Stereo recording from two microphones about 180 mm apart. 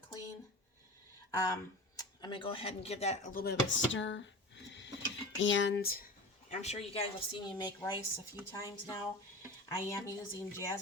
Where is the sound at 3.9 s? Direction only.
90° left.